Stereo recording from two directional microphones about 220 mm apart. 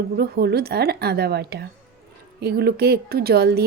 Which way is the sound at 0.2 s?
45° right (ahead or behind).